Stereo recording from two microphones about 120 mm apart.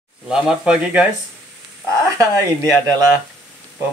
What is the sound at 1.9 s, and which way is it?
Speech, 25° right (ahead or behind).